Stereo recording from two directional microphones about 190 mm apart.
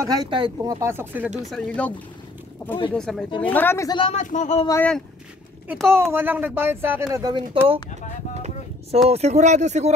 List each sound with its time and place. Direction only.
0.0 s speech: 20° right (ahead or behind)
0.7 s speech: 15° right (ahead or behind)
1.5 s a woman's voice: 5° left (ahead or behind); by 4.6 s 40° left (ahead or behind)
4.6 s speech: 10° left (ahead or behind)
5.7 s speech: 10° right (ahead or behind)
8.4 s a sound: 35° right (ahead or behind)
9.1 s speech: 35° right (ahead or behind)